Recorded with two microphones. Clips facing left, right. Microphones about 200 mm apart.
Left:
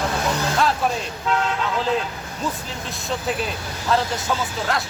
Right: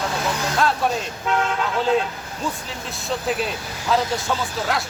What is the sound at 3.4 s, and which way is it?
Speech, centre (ahead or behind).